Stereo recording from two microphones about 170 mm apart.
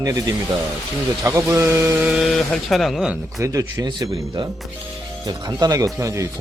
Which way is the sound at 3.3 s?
20° right (ahead or behind).